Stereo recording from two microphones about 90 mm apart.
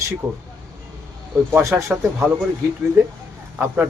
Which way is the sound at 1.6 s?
30° right (ahead or behind).